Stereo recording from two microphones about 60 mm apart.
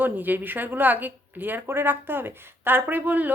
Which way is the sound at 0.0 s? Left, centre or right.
Right.